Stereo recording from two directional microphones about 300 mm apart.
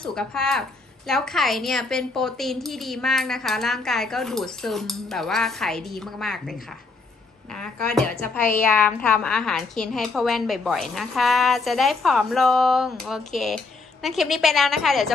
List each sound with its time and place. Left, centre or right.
0.0 s a woman's voice: centre
7.5 s a woman's voice: centre